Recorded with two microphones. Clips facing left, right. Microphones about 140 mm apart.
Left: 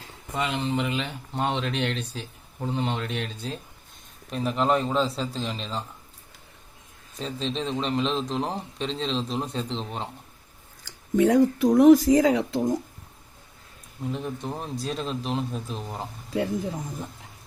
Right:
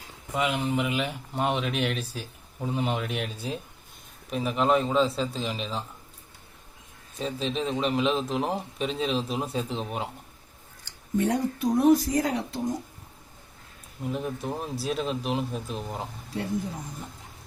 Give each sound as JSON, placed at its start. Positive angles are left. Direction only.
{"t": 0.3, "sound": "a man's voice", "side_deg": -5}
{"t": 7.2, "sound": "a man's voice", "side_deg": -5}
{"t": 10.8, "sound": "speech", "side_deg": 90}
{"t": 14.1, "sound": "speech", "side_deg": -5}